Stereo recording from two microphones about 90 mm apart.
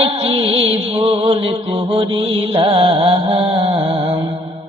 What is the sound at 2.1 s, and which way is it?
Mantra, 65° right (ahead or behind).